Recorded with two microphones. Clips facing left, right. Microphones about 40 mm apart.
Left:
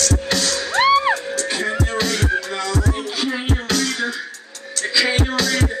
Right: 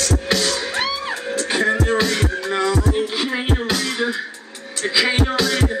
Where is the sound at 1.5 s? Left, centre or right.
Right.